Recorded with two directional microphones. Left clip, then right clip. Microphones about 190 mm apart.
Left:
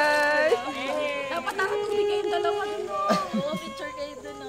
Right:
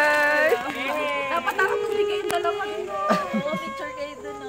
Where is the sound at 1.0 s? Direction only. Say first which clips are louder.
Right 4 dB; 35° right (ahead or behind).